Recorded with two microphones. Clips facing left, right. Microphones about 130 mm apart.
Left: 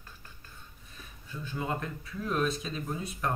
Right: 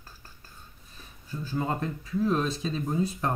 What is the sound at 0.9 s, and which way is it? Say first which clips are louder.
Speech: right 4 dB; 35° right (ahead or behind).